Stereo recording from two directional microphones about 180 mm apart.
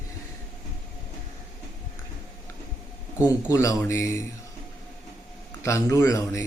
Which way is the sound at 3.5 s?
15° left (ahead or behind).